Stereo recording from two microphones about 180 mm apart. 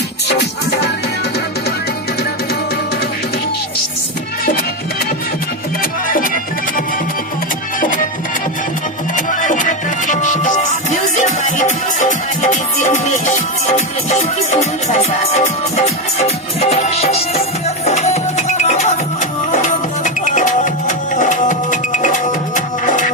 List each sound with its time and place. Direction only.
5.8 s music: 50° left (ahead or behind)
9.1 s music: 45° left (ahead or behind)